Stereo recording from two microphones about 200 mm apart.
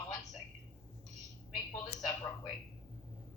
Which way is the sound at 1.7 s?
20° left (ahead or behind).